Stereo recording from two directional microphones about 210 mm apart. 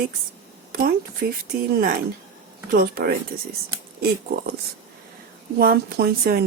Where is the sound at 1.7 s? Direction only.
45° right (ahead or behind).